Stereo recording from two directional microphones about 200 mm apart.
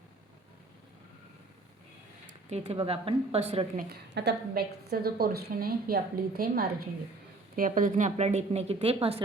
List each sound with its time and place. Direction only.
2.5 s a woman's voice: 30° right (ahead or behind)
3.8 s a woman's voice: 55° right (ahead or behind); by 9.2 s 30° right (ahead or behind)